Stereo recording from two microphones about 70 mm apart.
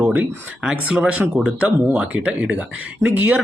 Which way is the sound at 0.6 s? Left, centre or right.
Centre.